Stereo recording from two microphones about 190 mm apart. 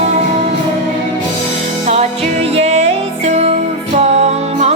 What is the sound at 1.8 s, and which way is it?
Music, 35° right (ahead or behind).